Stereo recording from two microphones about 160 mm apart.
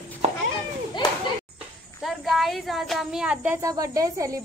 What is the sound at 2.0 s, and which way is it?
Speech, centre (ahead or behind).